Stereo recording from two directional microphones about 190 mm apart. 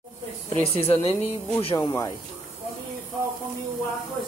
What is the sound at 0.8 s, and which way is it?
Speech, 30° left (ahead or behind).